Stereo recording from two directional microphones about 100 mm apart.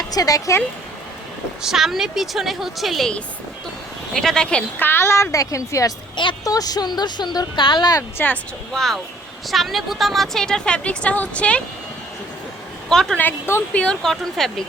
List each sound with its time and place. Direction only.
0.1 s speech: 35° left (ahead or behind)
1.6 s a woman's voice: 5° right (ahead or behind)
4.9 s speech: 25° left (ahead or behind); by 8.0 s 45° left (ahead or behind)
8.7 s speech: 5° left (ahead or behind)
12.9 s speech: 5° left (ahead or behind)
13.1 s a woman's voice: 20° left (ahead or behind)
13.7 s speech: 5° left (ahead or behind)